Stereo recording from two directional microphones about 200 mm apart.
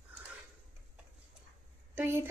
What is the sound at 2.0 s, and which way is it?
Speech, 10° right (ahead or behind).